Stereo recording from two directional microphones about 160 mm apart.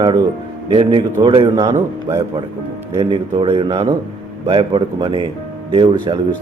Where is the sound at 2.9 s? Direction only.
30° right (ahead or behind).